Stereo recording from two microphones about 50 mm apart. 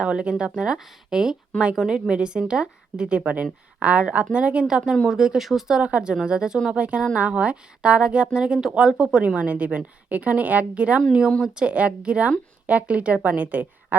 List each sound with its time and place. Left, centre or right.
0.0 s a woman's voice: right; by 2.0 s centre
2.0 s a woman's voice: centre
5.8 s a woman's voice: right